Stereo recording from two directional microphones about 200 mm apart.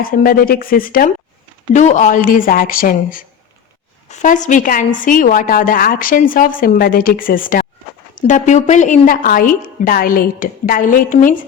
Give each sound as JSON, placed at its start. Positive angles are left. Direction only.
{"t": 0.0, "sound": "a woman's voice", "side_deg": 45}